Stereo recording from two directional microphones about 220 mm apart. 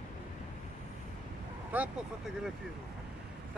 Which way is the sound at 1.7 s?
5° right (ahead or behind).